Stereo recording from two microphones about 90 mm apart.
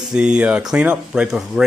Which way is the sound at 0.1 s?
10° right (ahead or behind).